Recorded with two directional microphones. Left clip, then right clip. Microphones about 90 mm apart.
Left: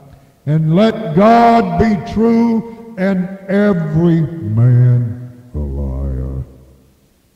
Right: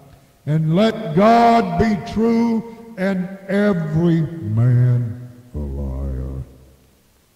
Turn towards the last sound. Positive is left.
turn(degrees=-30)  # may be behind; listen again after turning